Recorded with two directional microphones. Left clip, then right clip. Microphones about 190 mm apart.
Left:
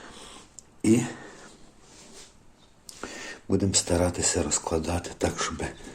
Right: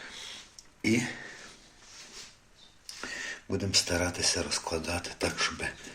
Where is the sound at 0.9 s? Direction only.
15° left (ahead or behind).